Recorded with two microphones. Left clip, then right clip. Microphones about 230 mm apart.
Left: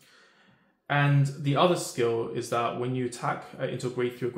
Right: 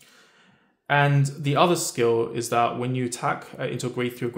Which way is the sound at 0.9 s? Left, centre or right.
Right.